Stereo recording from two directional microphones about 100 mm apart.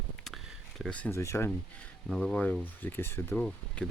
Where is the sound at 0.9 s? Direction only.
15° left (ahead or behind).